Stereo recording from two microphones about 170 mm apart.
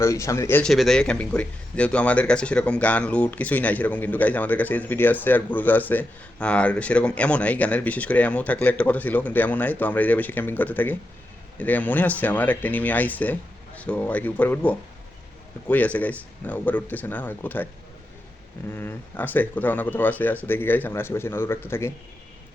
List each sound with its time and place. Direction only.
0.0 s speech: 15° left (ahead or behind)
0.7 s speech: centre (ahead or behind)
18.7 s speech: 15° left (ahead or behind)